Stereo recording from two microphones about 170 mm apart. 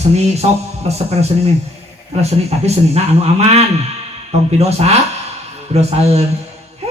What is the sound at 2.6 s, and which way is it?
Speech, 40° right (ahead or behind).